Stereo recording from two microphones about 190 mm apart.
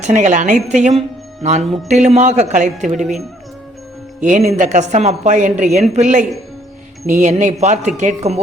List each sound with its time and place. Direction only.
0.0 s a woman's voice: 40° right (ahead or behind)
4.2 s a woman's voice: 40° right (ahead or behind)